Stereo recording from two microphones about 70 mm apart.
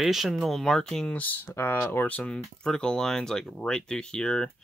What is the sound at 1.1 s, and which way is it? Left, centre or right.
Speech, left.